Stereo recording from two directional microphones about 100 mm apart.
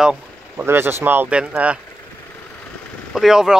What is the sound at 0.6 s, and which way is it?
Speech, 25° right (ahead or behind).